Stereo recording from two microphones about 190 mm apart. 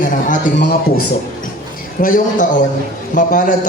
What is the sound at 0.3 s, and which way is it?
A man's voice, 45° left (ahead or behind).